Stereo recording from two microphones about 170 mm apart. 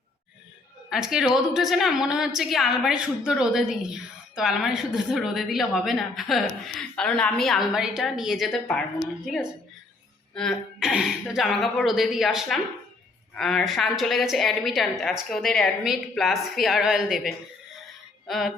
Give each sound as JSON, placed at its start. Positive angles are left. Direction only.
{"t": 0.9, "sound": "a woman's voice", "side_deg": -5}